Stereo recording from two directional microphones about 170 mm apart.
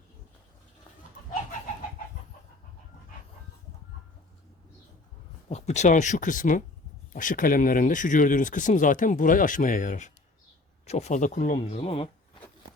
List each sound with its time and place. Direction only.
5.5 s speech: 40° left (ahead or behind)
11.8 s speech: 35° left (ahead or behind)